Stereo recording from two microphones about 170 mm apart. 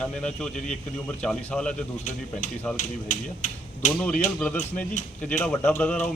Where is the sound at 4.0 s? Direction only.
5° left (ahead or behind).